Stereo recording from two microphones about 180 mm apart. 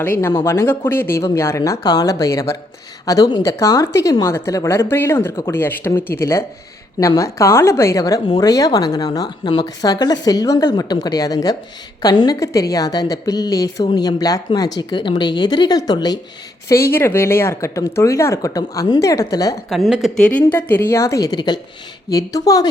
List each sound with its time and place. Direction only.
0.0 s a woman's voice: 10° left (ahead or behind)
19.7 s a woman's voice: centre (ahead or behind); by 22.7 s 20° left (ahead or behind)